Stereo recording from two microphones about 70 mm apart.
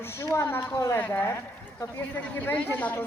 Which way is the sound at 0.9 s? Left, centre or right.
Left.